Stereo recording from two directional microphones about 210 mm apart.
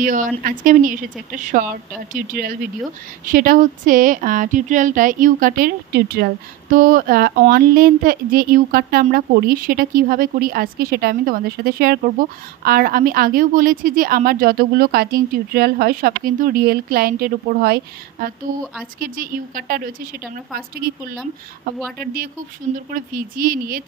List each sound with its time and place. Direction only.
0.0 s speech: 40° right (ahead or behind)
22.9 s speech: 40° right (ahead or behind)